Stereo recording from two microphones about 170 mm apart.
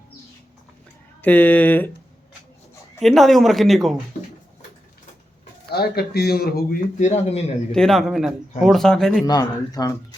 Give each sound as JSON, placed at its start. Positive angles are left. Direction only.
{"t": 1.2, "sound": "speech", "side_deg": 10}
{"t": 3.0, "sound": "speech", "side_deg": 0}
{"t": 5.7, "sound": "speech", "side_deg": 70}
{"t": 7.0, "sound": "speech", "side_deg": 40}
{"t": 7.7, "sound": "speech", "side_deg": 5}
{"t": 9.2, "sound": "speech", "side_deg": 20}